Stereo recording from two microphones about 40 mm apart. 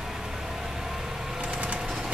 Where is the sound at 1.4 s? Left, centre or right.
Right.